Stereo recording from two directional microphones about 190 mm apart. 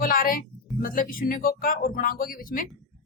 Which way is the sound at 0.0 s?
50° left (ahead or behind).